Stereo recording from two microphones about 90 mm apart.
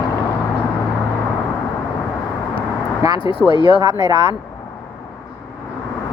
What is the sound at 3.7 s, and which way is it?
Speech, 45° right (ahead or behind).